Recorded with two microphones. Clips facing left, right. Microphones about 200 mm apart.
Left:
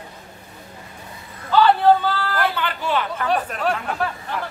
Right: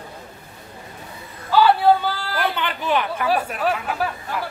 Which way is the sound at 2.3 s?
15° right (ahead or behind).